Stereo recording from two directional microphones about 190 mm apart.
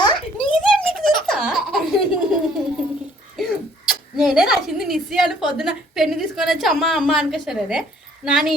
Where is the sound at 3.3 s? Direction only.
Centre (ahead or behind).